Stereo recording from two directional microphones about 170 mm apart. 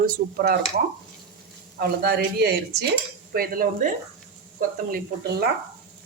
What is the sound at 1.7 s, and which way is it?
Speech, 70° right (ahead or behind).